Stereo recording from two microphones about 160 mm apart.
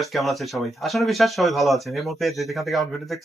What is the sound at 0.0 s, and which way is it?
Speech, centre (ahead or behind).